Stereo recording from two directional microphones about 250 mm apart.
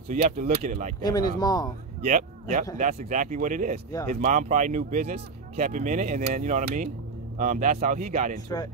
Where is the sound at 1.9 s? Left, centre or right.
Right.